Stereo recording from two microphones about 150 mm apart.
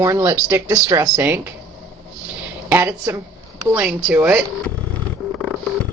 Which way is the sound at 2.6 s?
15° right (ahead or behind).